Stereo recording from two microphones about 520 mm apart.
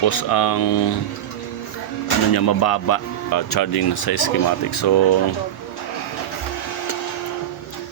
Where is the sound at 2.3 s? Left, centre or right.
Left.